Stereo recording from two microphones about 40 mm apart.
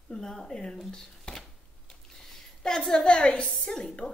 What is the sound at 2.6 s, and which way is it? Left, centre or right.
Speech, centre.